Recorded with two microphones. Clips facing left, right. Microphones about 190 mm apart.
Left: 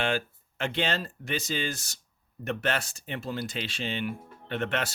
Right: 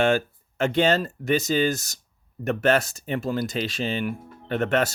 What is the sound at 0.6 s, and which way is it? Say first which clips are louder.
Speech: right 9 dB; 45° right (ahead or behind).